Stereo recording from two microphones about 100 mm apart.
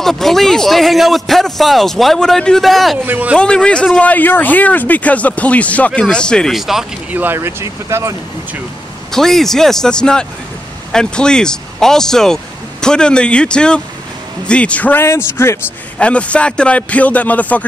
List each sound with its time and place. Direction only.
0.0 s a man's voice: 5° left (ahead or behind)
3.1 s speech: 15° right (ahead or behind)
3.3 s speech: 10° left (ahead or behind)
6.5 s a man's voice: 5° right (ahead or behind)
7.1 s speech: 20° right (ahead or behind)
9.1 s a man's voice: 5° left (ahead or behind); by 15.6 s 25° left (ahead or behind)
16.0 s speech: 10° left (ahead or behind)